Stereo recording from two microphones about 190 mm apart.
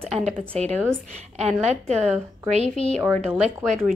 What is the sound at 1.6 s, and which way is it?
Speech, 35° right (ahead or behind).